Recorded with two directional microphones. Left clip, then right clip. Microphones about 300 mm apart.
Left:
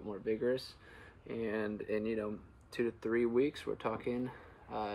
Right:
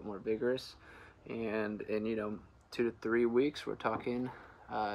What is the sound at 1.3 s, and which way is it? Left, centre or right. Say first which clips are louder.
Speech: right 1 dB; right.